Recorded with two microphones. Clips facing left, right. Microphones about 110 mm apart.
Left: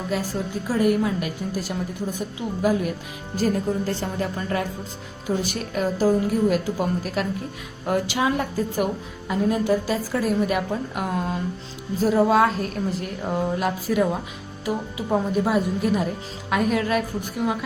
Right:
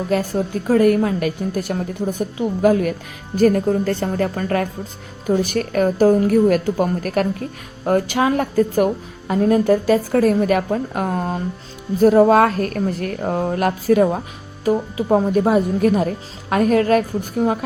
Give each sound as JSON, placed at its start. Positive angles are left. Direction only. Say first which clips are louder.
{"t": 0.7, "sound": "a woman's voice", "louder": "right 6 dB", "side_deg": -55}
{"t": 10.9, "sound": "speech", "louder": "right 4 dB", "side_deg": -40}
{"t": 11.9, "sound": "a woman's voice", "louder": "right 6 dB", "side_deg": -55}
{"t": 15.1, "sound": "a woman's voice", "louder": "right 6 dB", "side_deg": -45}